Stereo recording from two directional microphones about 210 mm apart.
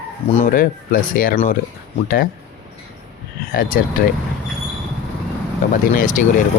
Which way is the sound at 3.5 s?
40° left (ahead or behind).